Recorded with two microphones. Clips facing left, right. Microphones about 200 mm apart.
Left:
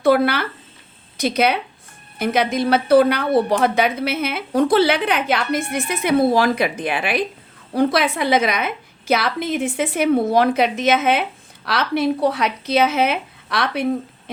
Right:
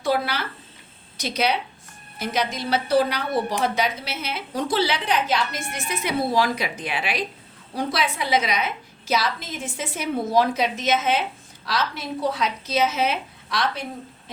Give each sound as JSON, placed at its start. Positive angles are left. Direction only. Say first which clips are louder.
{"t": 0.0, "sound": "speech", "louder": "left 8 dB", "side_deg": 60}